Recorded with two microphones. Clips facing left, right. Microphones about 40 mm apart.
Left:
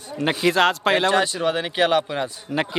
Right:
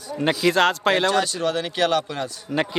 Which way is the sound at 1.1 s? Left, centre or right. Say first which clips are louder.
Left 2 dB; centre.